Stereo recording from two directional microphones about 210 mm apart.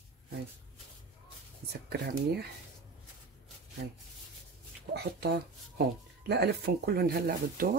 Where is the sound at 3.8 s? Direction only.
50° right (ahead or behind).